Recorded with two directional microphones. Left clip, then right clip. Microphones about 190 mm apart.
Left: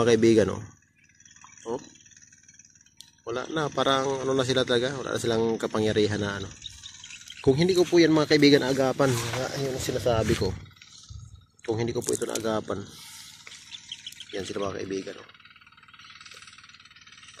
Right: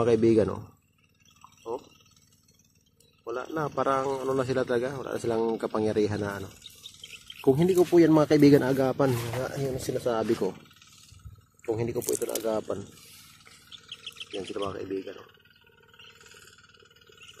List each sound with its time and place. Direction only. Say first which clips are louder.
0.0 s speech: left 2 dB; 5° left (ahead or behind)
3.3 s a man's voice: left 2 dB; 10° left (ahead or behind)
7.9 s speech: right 1 dB; 15° right (ahead or behind)
8.9 s speech: left 2 dB; 5° left (ahead or behind)
9.8 s speech: left 3 dB; 15° right (ahead or behind)
10.3 s speech: even; centre (ahead or behind)
11.6 s a man's voice: left 1 dB; centre (ahead or behind)
14.3 s a man's voice: left 2 dB; 15° left (ahead or behind)